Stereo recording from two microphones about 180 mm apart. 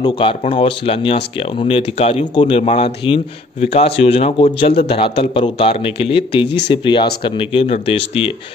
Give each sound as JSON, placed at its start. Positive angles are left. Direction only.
{"t": 0.0, "sound": "speech", "side_deg": 30}